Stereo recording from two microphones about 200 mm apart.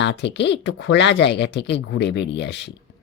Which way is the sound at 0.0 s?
60° left (ahead or behind).